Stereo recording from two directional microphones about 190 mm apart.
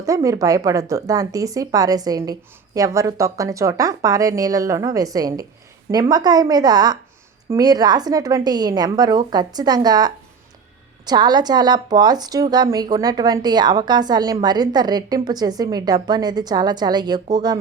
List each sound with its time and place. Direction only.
0.0 s a woman's voice: 15° right (ahead or behind)